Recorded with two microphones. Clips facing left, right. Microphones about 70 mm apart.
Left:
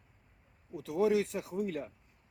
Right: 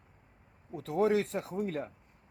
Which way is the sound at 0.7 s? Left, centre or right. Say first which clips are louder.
Right 1 dB; right.